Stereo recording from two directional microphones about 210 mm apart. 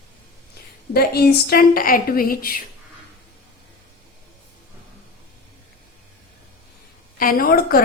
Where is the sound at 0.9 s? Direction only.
50° left (ahead or behind).